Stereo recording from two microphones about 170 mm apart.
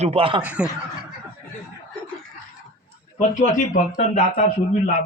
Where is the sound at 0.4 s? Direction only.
10° right (ahead or behind).